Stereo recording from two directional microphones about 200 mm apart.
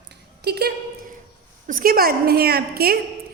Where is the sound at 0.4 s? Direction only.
55° right (ahead or behind).